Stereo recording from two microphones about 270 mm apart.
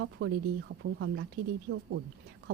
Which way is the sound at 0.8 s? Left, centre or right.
Right.